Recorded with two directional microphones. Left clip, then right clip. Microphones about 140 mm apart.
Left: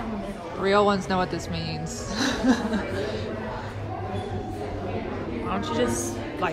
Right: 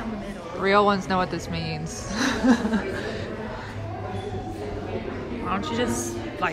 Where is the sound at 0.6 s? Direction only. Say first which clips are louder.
Right 1 dB; 15° left (ahead or behind).